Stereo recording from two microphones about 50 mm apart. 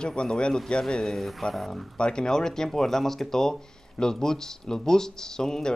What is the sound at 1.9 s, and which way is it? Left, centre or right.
Speech, centre.